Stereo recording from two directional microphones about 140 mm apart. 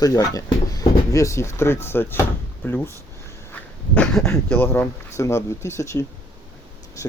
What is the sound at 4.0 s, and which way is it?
Speech, 5° left (ahead or behind).